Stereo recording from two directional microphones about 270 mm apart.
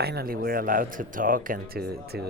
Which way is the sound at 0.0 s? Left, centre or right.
Right.